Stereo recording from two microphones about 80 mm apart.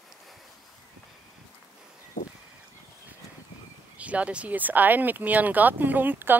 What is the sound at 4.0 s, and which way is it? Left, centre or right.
Speech, centre.